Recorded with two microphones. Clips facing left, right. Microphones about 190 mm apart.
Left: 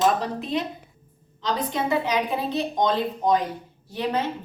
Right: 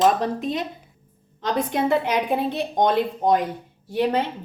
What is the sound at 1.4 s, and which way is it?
A woman's voice, 55° right (ahead or behind).